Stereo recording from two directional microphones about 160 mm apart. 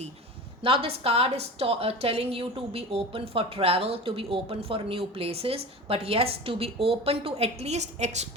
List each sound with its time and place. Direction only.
0.6 s a woman's voice: 35° right (ahead or behind)